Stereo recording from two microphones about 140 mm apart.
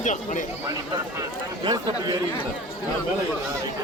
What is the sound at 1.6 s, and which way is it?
Speech, 30° right (ahead or behind).